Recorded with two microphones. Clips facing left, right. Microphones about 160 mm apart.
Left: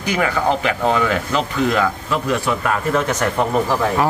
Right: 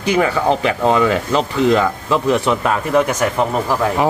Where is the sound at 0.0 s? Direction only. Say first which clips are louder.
Right 3 dB; 30° right (ahead or behind).